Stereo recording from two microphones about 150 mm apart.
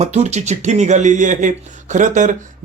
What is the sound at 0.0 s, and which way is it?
Speech, 50° right (ahead or behind).